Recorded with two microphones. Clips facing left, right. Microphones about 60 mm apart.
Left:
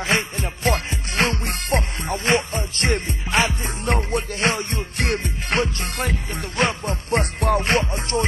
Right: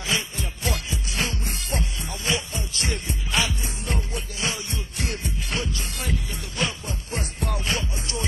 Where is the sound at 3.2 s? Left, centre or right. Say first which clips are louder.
Left 5 dB; left.